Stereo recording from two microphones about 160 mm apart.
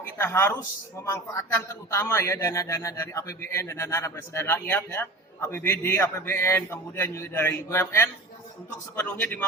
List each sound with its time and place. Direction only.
0.0 s a man's voice: 15° left (ahead or behind)